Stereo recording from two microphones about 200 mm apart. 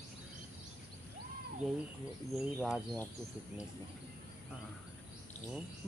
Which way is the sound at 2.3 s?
Centre (ahead or behind).